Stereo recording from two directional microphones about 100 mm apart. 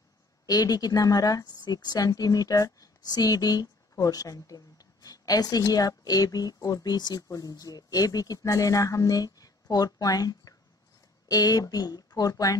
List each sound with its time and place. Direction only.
0.5 s a woman's voice: 40° left (ahead or behind)